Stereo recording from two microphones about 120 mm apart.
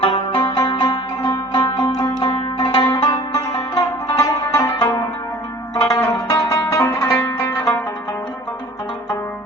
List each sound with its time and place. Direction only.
0.0 s music: 45° left (ahead or behind)
6.1 s zither: 30° left (ahead or behind)